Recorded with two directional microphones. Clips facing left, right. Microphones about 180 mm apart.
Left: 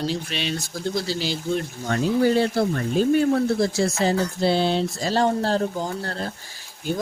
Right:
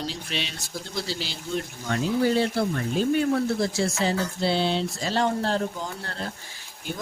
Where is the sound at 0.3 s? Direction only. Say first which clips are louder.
Left 4 dB; 50° left (ahead or behind).